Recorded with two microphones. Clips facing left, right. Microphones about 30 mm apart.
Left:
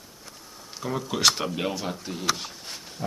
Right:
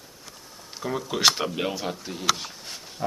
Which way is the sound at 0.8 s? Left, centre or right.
Centre.